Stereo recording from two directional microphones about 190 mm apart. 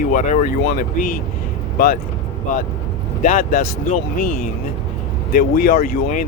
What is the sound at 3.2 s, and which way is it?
Speech, 45° left (ahead or behind).